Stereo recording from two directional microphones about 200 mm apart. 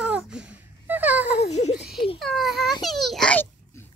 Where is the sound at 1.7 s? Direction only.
Centre (ahead or behind).